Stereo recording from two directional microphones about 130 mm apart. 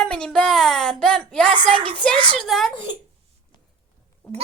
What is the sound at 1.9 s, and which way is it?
Speech, 10° left (ahead or behind).